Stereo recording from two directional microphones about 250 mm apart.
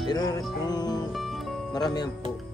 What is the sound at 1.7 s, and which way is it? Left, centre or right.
Speech, centre.